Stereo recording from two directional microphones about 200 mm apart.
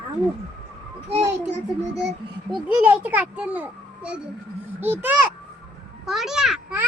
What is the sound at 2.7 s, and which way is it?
A child's voice, 10° right (ahead or behind).